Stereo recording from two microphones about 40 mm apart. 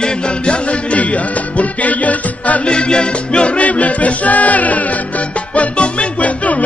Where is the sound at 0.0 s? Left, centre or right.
Left.